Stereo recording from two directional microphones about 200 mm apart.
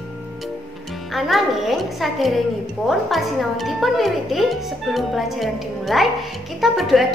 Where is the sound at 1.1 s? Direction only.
Centre (ahead or behind).